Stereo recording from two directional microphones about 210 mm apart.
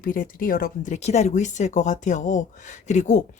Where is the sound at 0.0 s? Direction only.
45° left (ahead or behind).